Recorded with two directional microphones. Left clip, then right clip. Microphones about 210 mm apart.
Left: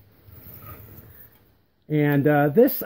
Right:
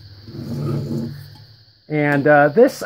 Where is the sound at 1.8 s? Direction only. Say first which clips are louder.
Right 6 dB; 50° left (ahead or behind).